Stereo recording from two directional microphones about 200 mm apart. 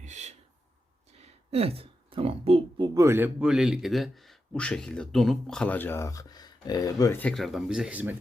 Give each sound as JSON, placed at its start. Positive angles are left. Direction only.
{"t": 0.0, "sound": "speech", "side_deg": -35}